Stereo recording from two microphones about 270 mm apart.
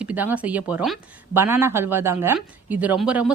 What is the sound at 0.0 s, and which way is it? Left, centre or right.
A woman's voice, centre.